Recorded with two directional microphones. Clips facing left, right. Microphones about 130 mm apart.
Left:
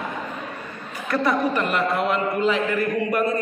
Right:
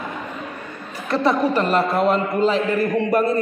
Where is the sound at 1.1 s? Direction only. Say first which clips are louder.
Right 3 dB; 30° right (ahead or behind).